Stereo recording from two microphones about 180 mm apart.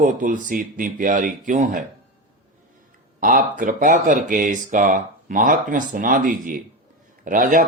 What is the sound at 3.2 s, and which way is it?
Speech, 50° right (ahead or behind).